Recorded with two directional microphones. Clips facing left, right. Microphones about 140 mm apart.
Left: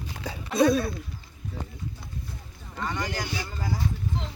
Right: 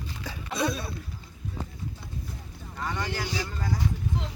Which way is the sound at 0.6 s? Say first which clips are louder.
Left 8 dB; 50° left (ahead or behind).